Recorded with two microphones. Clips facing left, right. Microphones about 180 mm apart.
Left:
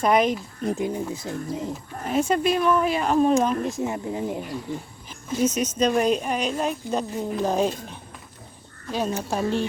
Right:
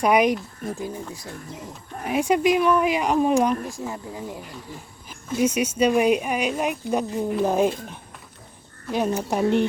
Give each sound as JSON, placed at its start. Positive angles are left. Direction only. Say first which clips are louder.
{"t": 0.0, "sound": "speech", "louder": "right 1 dB", "side_deg": -10}
{"t": 0.6, "sound": "speech", "louder": "left 5 dB", "side_deg": 20}
{"t": 2.0, "sound": "speech", "louder": "right 2 dB", "side_deg": -10}
{"t": 3.6, "sound": "speech", "louder": "left 5 dB", "side_deg": 20}
{"t": 5.0, "sound": "speech", "louder": "right 1 dB", "side_deg": -10}
{"t": 8.9, "sound": "speech", "louder": "right 3 dB", "side_deg": -15}